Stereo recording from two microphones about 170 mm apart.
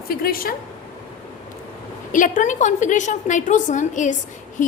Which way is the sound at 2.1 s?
50° left (ahead or behind).